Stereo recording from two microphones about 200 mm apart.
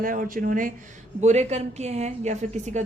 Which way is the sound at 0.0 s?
45° right (ahead or behind).